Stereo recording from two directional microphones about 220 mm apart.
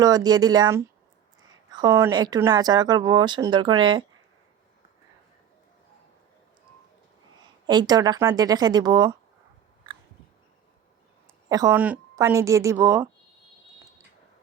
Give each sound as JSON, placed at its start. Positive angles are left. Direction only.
{"t": 0.0, "sound": "a woman's voice", "side_deg": -15}
{"t": 7.7, "sound": "a woman's voice", "side_deg": -20}
{"t": 11.4, "sound": "a woman's voice", "side_deg": -15}